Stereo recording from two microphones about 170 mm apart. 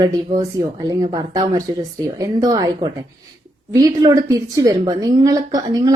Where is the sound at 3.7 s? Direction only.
20° right (ahead or behind).